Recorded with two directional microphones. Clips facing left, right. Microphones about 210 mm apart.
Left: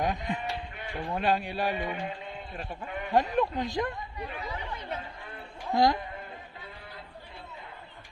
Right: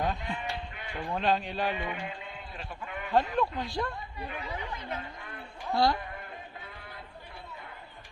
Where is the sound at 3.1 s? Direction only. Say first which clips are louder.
Left 1 dB; 20° left (ahead or behind).